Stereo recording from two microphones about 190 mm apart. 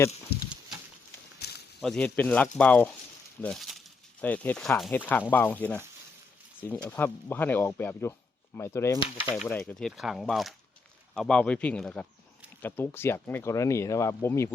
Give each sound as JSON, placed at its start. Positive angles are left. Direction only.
{"t": 0.3, "sound": "a sound", "side_deg": 55}
{"t": 1.8, "sound": "speech", "side_deg": 5}
{"t": 9.3, "sound": "speech", "side_deg": 0}